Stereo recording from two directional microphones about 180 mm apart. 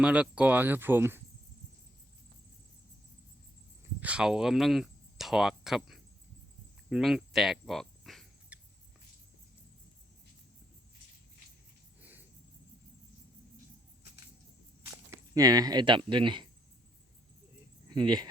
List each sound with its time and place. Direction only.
0.0 s speech: 5° right (ahead or behind)
4.0 s speech: 5° right (ahead or behind)
6.9 s cricket: centre (ahead or behind)
15.1 s speech: 20° right (ahead or behind)
17.8 s speech: 25° right (ahead or behind)